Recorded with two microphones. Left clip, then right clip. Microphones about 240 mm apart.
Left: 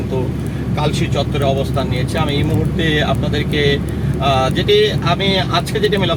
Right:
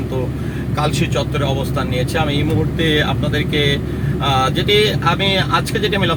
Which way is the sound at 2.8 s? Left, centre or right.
Centre.